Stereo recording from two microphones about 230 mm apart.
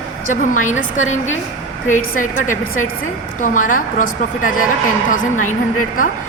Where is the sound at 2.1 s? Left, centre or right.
Left.